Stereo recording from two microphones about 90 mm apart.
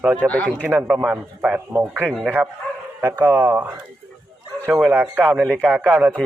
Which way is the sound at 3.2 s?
20° right (ahead or behind).